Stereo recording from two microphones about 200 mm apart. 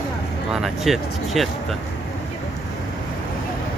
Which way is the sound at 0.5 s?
Centre (ahead or behind).